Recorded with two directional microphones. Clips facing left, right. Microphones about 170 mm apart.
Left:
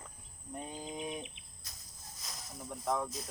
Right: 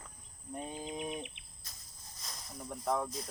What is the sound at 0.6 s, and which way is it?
Speech, 5° right (ahead or behind).